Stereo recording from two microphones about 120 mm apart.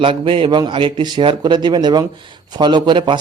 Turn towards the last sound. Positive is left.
turn(degrees=-40)  # may be behind; listen again after turning